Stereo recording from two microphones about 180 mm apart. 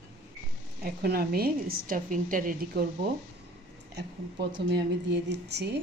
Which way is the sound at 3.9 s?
70° right (ahead or behind).